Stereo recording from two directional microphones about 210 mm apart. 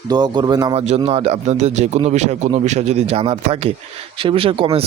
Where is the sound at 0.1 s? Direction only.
20° right (ahead or behind).